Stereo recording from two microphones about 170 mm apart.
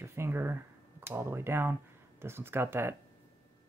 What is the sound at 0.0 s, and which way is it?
Speech, 15° right (ahead or behind).